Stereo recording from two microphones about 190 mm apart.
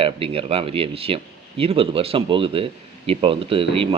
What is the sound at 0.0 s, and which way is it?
Speech, 30° right (ahead or behind).